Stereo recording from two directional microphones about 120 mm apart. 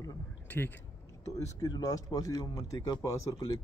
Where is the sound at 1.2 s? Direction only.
25° left (ahead or behind).